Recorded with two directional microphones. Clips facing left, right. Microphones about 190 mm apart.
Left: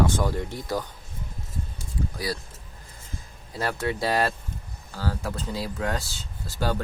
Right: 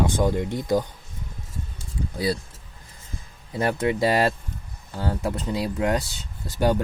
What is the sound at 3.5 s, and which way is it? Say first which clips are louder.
Speech: right 5 dB; 20° right (ahead or behind).